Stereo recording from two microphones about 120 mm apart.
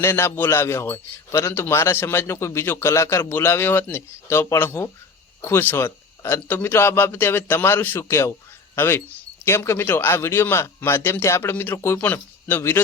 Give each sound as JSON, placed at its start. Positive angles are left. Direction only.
{"t": 0.0, "sound": "a man's voice", "side_deg": 20}